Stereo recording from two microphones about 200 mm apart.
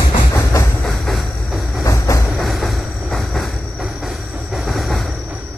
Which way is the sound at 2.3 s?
Centre (ahead or behind).